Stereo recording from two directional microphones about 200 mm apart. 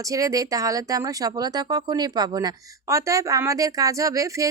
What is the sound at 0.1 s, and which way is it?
Speech, 15° right (ahead or behind).